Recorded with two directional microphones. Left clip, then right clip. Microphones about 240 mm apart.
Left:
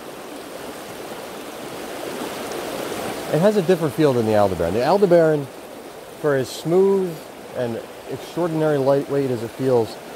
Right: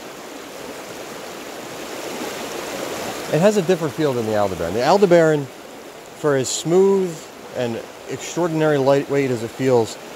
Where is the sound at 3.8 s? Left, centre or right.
Centre.